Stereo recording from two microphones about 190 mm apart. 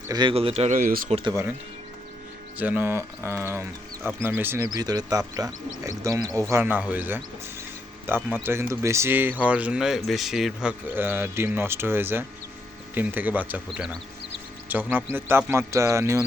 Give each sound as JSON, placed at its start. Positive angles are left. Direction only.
{"t": 0.1, "sound": "speech", "side_deg": -25}
{"t": 1.3, "sound": "speech", "side_deg": -15}
{"t": 2.6, "sound": "speech", "side_deg": -10}